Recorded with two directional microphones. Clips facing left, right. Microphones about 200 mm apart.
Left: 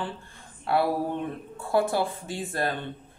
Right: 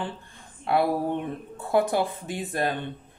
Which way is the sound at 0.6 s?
20° right (ahead or behind).